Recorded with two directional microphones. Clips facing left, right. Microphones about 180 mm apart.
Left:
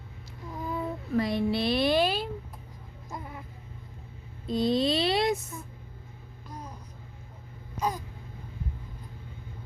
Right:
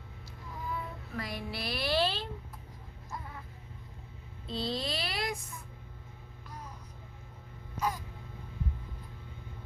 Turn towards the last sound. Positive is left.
turn(degrees=20)  # may be behind; listen again after turning